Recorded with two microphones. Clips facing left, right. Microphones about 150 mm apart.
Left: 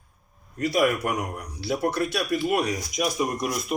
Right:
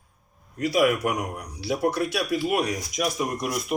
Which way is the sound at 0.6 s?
5° right (ahead or behind).